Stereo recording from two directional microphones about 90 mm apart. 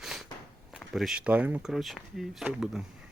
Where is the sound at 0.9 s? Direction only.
Centre (ahead or behind).